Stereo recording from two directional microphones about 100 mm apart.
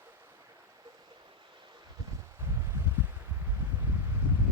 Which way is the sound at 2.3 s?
25° right (ahead or behind).